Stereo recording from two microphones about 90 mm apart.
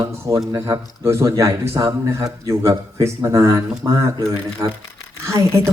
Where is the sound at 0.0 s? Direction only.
40° right (ahead or behind).